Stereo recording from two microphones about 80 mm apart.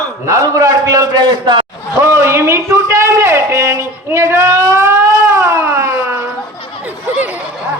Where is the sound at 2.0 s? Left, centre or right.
Right.